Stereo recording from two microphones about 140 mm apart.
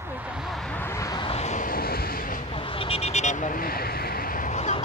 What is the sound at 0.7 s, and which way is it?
Vehicle, 20° left (ahead or behind).